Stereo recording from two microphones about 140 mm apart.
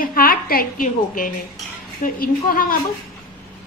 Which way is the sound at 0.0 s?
90° left.